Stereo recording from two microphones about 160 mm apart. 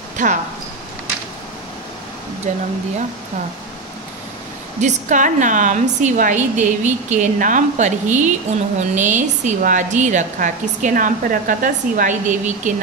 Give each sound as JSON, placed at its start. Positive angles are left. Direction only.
{"t": 0.2, "sound": "a woman's voice", "side_deg": -50}
{"t": 2.5, "sound": "a woman's voice", "side_deg": -50}
{"t": 4.8, "sound": "a woman's voice", "side_deg": -45}